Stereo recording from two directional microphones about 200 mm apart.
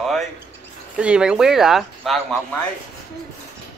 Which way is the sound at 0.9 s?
5° right (ahead or behind).